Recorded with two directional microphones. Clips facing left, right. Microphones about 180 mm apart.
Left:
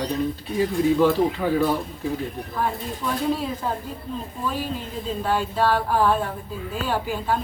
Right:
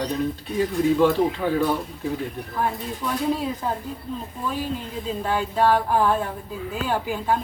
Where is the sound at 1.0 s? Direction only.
5° left (ahead or behind).